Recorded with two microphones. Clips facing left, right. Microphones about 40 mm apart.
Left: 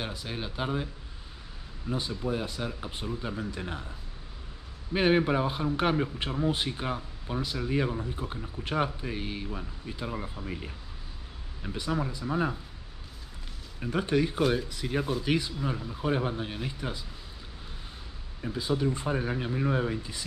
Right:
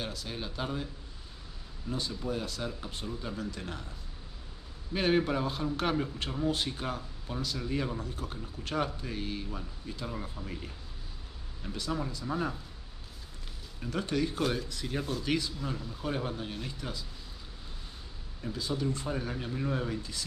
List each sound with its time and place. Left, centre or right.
0.0 s speech: left
1.9 s speech: centre
4.9 s speech: centre
13.7 s speech: left
18.4 s speech: left